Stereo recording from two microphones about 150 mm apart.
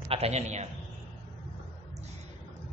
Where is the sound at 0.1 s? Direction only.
45° right (ahead or behind).